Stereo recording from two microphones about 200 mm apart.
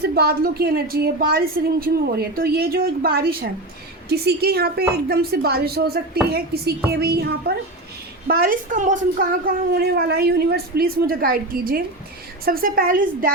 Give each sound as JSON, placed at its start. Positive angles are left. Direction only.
{"t": 0.0, "sound": "a woman's voice", "side_deg": -50}
{"t": 9.4, "sound": "a woman's voice", "side_deg": -50}